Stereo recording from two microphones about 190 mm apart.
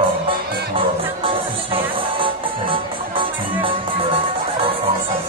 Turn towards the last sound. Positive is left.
turn(degrees=-25)  # may be behind; listen again after turning